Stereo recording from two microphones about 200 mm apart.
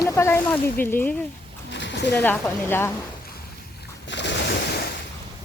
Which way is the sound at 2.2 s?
10° left (ahead or behind).